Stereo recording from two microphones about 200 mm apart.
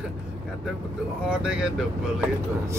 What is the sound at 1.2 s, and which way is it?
Speech, 5° right (ahead or behind).